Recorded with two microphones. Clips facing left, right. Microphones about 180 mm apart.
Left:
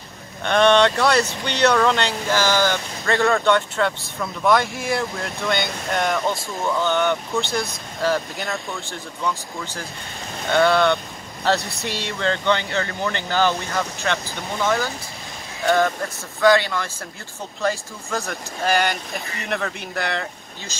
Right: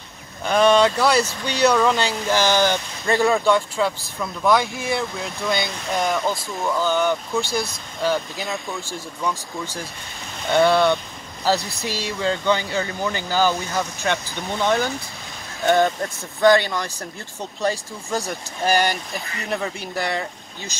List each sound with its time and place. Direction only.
0.4 s speech: 5° right (ahead or behind)
2.4 s speech: 20° right (ahead or behind)
3.3 s speech: 10° right (ahead or behind)
10.5 s speech: 15° right (ahead or behind)
11.4 s speech: centre (ahead or behind)
14.0 s speech: 20° right (ahead or behind)
19.1 s speech: 5° right (ahead or behind)